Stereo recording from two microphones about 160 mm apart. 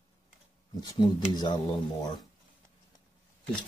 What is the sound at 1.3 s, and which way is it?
Speech, 25° left (ahead or behind).